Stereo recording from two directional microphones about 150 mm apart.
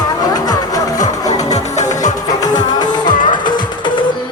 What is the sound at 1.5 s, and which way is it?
Music, 50° left (ahead or behind).